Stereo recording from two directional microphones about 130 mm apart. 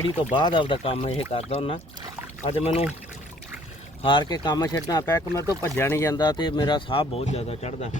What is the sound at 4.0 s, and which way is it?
Speech, 35° left (ahead or behind).